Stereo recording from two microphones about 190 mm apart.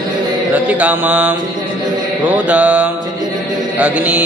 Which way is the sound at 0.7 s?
10° right (ahead or behind).